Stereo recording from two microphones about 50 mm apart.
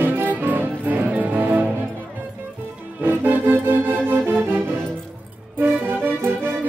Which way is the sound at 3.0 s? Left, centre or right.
Right.